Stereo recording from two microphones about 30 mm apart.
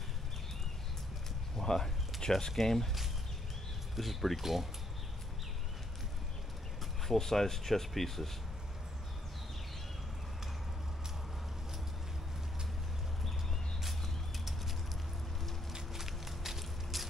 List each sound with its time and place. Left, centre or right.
1.6 s speech: centre
3.9 s speech: centre
7.1 s speech: centre
16.0 s a sound: centre